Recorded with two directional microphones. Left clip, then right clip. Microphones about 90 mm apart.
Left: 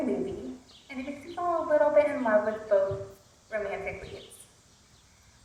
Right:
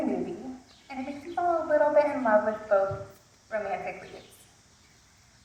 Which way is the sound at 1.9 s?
30° left (ahead or behind).